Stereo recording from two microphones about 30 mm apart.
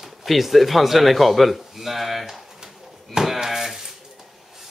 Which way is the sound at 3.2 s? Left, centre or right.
Centre.